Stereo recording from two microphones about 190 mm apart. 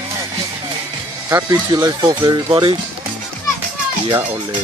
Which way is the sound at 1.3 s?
20° right (ahead or behind).